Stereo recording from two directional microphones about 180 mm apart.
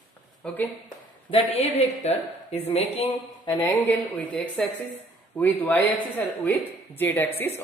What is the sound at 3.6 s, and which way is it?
Speech, 10° left (ahead or behind).